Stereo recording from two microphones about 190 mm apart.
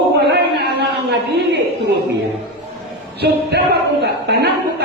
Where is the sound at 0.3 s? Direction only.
60° right (ahead or behind).